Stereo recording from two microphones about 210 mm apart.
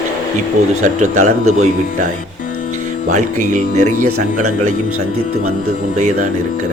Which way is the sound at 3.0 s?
35° right (ahead or behind).